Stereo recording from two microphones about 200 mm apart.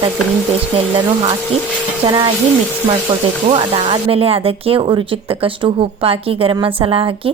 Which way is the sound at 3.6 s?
25° right (ahead or behind).